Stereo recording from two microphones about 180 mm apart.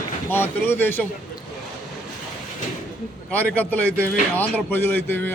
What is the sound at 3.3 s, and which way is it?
Speech, 10° left (ahead or behind).